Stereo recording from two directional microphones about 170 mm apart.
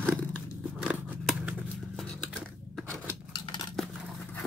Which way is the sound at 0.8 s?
10° right (ahead or behind).